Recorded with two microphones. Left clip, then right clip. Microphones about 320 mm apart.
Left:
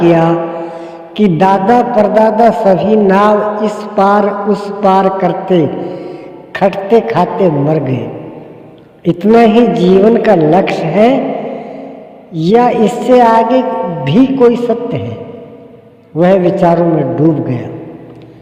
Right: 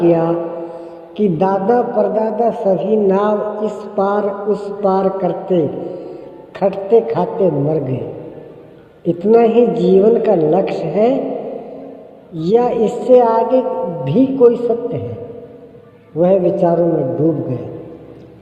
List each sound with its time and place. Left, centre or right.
0.0 s a man's voice: left
0.8 s a sound: left
1.5 s a man's voice: left
9.0 s a man's voice: left
12.3 s a man's voice: left
16.1 s a man's voice: left